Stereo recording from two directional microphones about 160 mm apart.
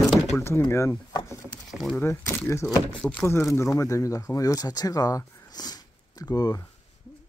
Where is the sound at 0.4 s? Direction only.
15° left (ahead or behind).